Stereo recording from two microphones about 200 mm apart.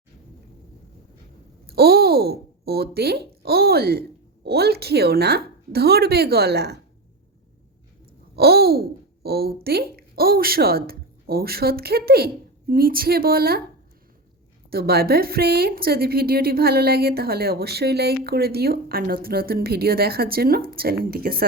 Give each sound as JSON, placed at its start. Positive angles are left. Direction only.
{"t": 1.6, "sound": "a woman's voice", "side_deg": -50}
{"t": 8.4, "sound": "speech", "side_deg": -50}
{"t": 14.7, "sound": "a woman's voice", "side_deg": -50}